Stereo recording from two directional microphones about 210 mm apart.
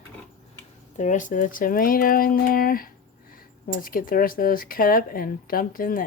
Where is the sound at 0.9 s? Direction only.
35° left (ahead or behind).